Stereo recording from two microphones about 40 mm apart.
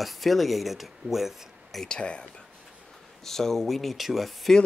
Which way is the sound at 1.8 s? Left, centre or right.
Left.